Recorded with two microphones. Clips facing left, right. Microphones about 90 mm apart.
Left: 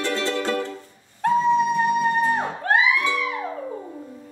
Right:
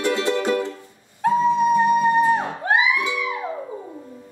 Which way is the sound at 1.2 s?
5° right (ahead or behind).